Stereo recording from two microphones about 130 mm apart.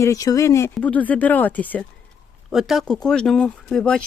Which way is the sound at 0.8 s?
10° left (ahead or behind).